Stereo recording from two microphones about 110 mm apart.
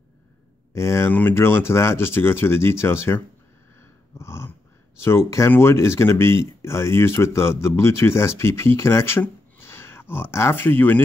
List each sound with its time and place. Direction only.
0.7 s speech: 25° left (ahead or behind)
4.2 s dog: 25° left (ahead or behind)
5.5 s speech: 25° left (ahead or behind)
9.2 s a sound: 20° left (ahead or behind)